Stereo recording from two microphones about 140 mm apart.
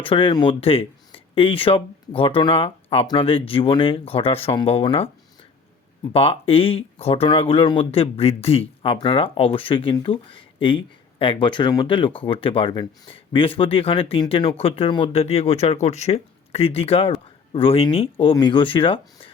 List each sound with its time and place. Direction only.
0.0 s speech: 40° left (ahead or behind)